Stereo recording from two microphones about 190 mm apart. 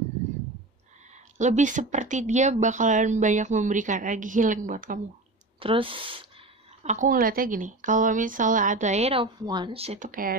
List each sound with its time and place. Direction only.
1.1 s speech: 40° right (ahead or behind)
5.6 s speech: 30° right (ahead or behind)
6.8 s a woman's voice: 40° right (ahead or behind)
10.0 s a woman's voice: 45° right (ahead or behind)